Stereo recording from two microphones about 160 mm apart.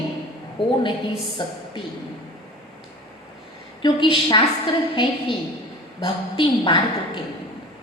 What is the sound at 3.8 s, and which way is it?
A woman's voice, 30° left (ahead or behind).